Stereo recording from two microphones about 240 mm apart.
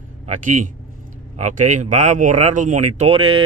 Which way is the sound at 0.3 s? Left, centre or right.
Right.